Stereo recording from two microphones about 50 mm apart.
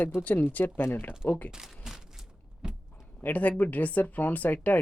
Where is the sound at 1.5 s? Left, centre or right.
Centre.